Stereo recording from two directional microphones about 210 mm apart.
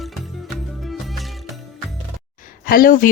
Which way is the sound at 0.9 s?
Centre (ahead or behind).